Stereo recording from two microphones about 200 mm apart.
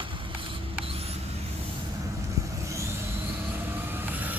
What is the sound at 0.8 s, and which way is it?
Rodents, 30° right (ahead or behind).